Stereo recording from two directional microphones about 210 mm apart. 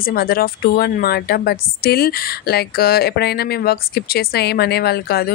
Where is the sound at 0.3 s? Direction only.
45° left (ahead or behind).